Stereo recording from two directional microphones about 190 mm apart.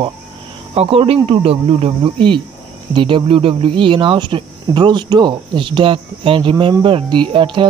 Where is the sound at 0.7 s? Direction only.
30° right (ahead or behind).